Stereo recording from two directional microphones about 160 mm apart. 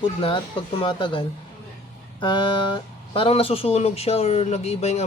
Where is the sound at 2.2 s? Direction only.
30° left (ahead or behind).